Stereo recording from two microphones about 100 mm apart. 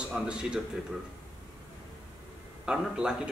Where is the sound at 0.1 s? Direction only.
5° right (ahead or behind).